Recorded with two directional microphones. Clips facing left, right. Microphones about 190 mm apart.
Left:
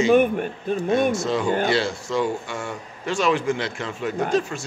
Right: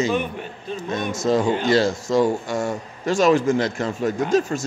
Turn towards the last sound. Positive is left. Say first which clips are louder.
# right 3 dB
turn(degrees=-40)  # may be behind; listen again after turning